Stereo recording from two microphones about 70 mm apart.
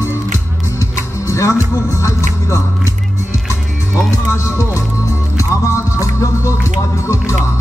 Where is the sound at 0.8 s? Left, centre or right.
Left.